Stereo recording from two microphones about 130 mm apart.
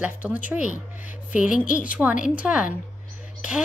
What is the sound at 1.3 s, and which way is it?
Speech, 90° left.